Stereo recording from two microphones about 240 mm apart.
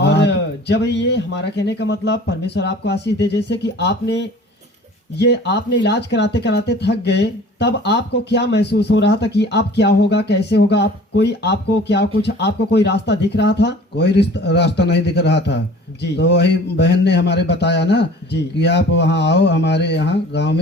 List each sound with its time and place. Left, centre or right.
0.0 s speech: left